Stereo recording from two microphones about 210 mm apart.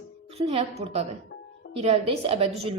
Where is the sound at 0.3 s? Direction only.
30° right (ahead or behind).